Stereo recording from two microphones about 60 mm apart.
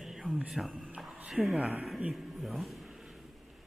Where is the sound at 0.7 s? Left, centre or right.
Centre.